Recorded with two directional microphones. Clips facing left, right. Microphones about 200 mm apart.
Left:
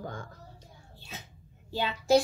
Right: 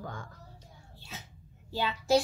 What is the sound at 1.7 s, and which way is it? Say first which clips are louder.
Speech: left 2 dB; 20° left (ahead or behind).